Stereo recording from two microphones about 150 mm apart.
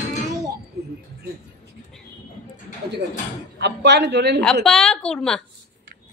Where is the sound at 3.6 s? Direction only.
90° right.